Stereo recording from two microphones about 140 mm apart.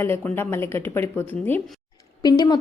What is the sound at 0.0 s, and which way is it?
A woman's voice, 15° left (ahead or behind).